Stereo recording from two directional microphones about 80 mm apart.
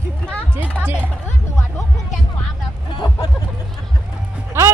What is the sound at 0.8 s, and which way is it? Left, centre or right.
Music, centre.